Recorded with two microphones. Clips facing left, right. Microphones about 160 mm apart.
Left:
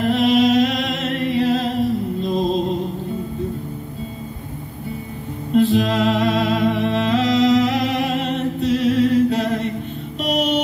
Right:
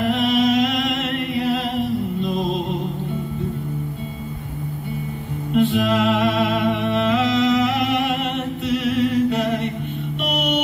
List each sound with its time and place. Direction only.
0.2 s music: 40° left (ahead or behind)
1.4 s humming: 35° left (ahead or behind)
2.2 s music: 35° left (ahead or behind)
5.5 s music: 35° left (ahead or behind)